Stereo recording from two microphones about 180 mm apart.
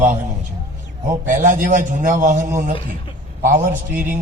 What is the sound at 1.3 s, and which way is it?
A man's voice, 45° right (ahead or behind).